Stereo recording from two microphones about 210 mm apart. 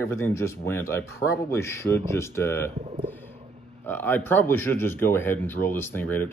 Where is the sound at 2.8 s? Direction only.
30° right (ahead or behind).